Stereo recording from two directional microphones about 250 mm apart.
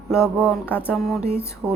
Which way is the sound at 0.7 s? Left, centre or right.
Centre.